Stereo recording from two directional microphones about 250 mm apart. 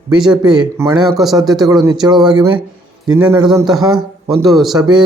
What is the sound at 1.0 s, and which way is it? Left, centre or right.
Speech, centre.